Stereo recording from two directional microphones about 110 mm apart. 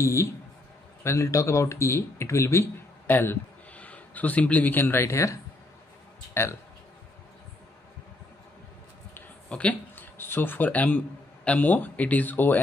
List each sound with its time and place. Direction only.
0.0 s speech: 25° left (ahead or behind)
9.1 s a sound: 10° left (ahead or behind)
11.4 s speech: 15° left (ahead or behind)